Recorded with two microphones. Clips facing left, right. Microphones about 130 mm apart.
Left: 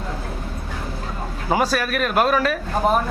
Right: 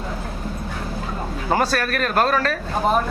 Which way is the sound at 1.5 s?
10° left (ahead or behind).